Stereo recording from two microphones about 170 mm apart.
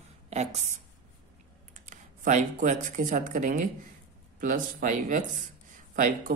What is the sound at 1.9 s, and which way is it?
Speech, 45° right (ahead or behind).